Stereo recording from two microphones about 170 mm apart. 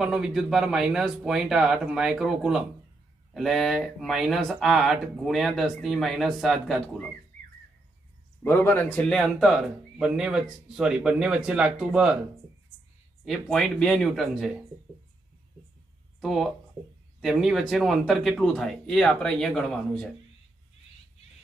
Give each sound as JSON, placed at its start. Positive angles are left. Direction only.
{"t": 0.0, "sound": "speech", "side_deg": -5}
{"t": 8.5, "sound": "speech", "side_deg": 15}
{"t": 13.2, "sound": "speech", "side_deg": 0}
{"t": 16.2, "sound": "speech", "side_deg": 0}